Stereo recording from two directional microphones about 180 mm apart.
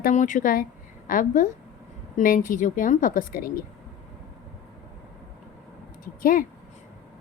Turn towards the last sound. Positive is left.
turn(degrees=50)  # may be behind; listen again after turning